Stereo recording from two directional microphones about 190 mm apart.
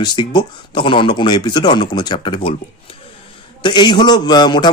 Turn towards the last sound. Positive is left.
turn(degrees=25)  # may be behind; listen again after turning